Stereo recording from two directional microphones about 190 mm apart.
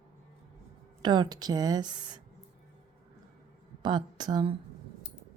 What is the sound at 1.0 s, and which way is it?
Speech, 25° right (ahead or behind).